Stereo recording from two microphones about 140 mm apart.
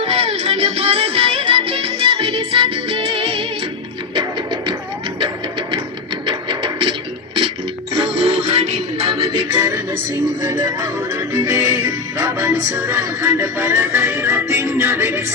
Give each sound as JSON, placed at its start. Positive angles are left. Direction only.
{"t": 0.0, "sound": "music", "side_deg": -45}
{"t": 7.9, "sound": "music", "side_deg": -40}
{"t": 9.6, "sound": "music", "side_deg": -20}